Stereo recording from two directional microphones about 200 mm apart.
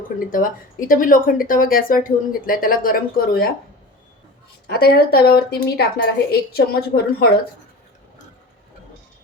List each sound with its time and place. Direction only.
0.2 s speech: 45° left (ahead or behind)
4.6 s speech: 50° left (ahead or behind)